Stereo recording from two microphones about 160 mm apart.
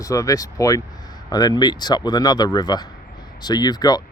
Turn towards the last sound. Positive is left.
turn(degrees=25)  # may be behind; listen again after turning